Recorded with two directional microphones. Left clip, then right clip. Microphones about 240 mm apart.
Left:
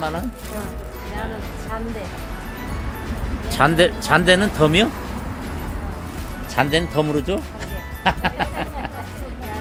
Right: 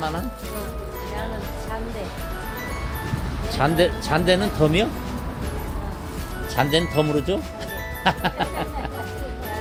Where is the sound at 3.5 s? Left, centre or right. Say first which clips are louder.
Left 4 dB; centre.